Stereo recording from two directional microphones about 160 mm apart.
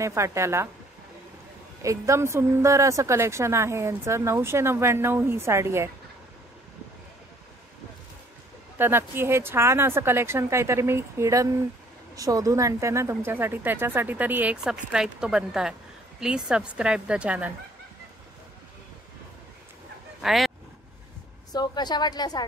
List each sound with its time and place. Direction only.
0.0 s a woman's voice: 20° right (ahead or behind)
1.8 s a woman's voice: 20° right (ahead or behind)
8.7 s a woman's voice: 15° right (ahead or behind)
20.2 s speech: centre (ahead or behind)
21.5 s a woman's voice: 25° left (ahead or behind)